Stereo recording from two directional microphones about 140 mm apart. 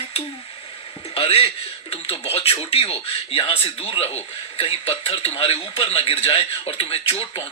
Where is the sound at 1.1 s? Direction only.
45° left (ahead or behind).